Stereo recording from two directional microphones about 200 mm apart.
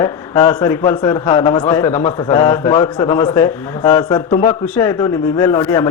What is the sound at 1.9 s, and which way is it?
Speech, 30° left (ahead or behind).